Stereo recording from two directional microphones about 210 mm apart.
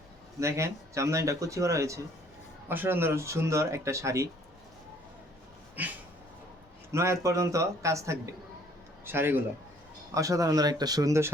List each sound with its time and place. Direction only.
0.3 s speech: 15° right (ahead or behind)
5.8 s speech: 10° right (ahead or behind)